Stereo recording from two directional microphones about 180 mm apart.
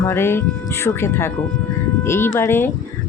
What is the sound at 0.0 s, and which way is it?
Speech, 15° left (ahead or behind).